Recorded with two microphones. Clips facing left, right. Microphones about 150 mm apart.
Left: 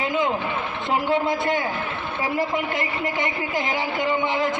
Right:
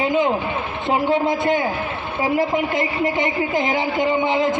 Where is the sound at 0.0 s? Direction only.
25° right (ahead or behind).